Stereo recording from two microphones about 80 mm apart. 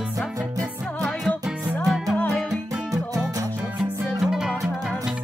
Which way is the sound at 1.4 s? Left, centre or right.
Centre.